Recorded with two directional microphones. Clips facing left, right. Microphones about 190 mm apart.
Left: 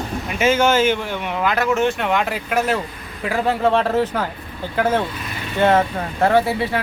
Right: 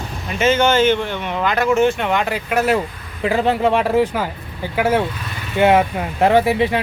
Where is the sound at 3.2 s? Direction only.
20° right (ahead or behind).